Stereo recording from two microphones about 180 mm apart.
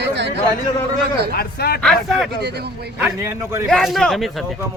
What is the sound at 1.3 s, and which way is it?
Speech, 60° left (ahead or behind).